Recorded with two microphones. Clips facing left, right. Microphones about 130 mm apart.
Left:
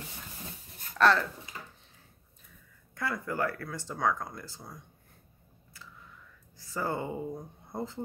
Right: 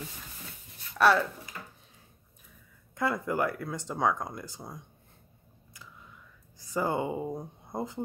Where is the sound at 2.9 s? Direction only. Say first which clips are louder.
Right 5 dB; 25° right (ahead or behind).